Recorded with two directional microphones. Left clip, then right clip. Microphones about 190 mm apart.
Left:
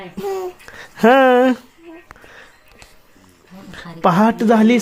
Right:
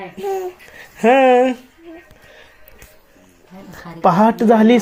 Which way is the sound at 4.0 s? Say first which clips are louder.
Right 2 dB; 20° left (ahead or behind).